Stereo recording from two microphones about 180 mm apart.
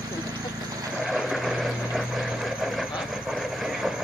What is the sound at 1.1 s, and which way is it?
Vehicle, centre (ahead or behind).